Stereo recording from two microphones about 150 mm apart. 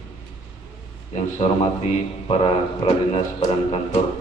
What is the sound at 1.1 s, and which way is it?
A man's voice, 45° left (ahead or behind).